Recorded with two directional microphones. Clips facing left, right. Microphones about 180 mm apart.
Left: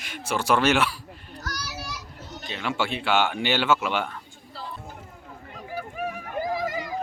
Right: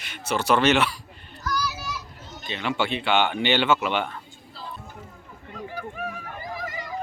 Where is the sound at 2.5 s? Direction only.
5° left (ahead or behind).